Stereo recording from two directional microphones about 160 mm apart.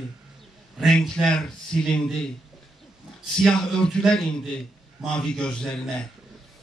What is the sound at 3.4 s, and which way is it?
Speech, 5° left (ahead or behind).